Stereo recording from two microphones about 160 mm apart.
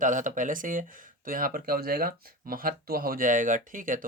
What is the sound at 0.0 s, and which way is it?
Speech, 55° right (ahead or behind).